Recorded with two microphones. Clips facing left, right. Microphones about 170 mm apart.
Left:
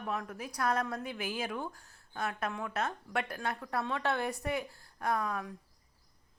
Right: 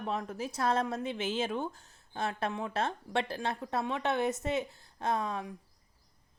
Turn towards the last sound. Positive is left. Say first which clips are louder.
# right 1 dB
turn(degrees=-25)  # may be behind; listen again after turning